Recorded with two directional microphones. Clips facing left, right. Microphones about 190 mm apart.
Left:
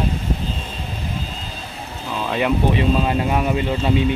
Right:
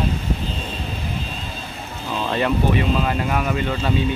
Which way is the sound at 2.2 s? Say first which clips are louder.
Left 1 dB; 10° left (ahead or behind).